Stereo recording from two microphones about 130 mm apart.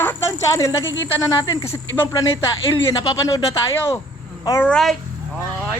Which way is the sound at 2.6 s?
40° left (ahead or behind).